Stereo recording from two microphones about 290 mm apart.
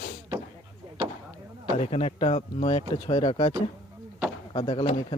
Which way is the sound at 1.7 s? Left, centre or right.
Left.